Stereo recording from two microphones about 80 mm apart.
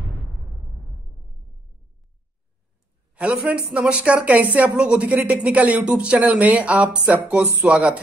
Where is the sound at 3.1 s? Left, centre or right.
Centre.